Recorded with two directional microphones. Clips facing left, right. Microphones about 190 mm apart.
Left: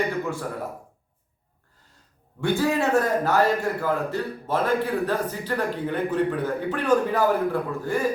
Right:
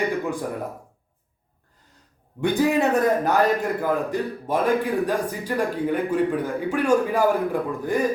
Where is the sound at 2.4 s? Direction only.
15° right (ahead or behind).